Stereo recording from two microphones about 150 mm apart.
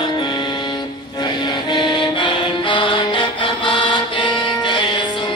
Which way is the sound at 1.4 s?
30° left (ahead or behind).